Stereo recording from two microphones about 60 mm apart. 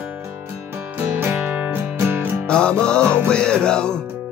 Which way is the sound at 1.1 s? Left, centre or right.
Right.